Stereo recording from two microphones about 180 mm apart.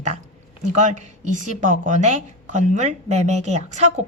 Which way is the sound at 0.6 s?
45° right (ahead or behind).